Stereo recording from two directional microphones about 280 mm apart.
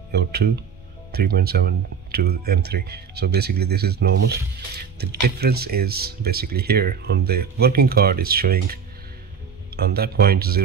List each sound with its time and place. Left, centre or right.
0.1 s speech: right